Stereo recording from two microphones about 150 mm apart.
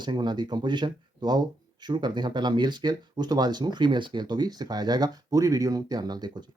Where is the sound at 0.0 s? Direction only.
30° right (ahead or behind).